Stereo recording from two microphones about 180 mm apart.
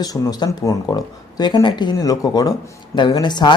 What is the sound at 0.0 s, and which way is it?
Speech, 20° left (ahead or behind).